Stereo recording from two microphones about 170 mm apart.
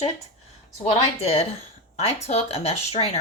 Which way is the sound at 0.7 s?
40° left (ahead or behind).